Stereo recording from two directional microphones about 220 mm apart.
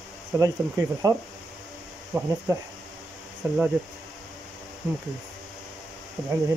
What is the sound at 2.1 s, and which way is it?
Speech, 15° right (ahead or behind).